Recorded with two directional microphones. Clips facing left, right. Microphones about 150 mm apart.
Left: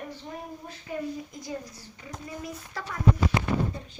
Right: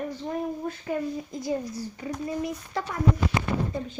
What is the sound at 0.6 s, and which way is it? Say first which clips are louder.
Speech: right 11 dB; 50° right (ahead or behind).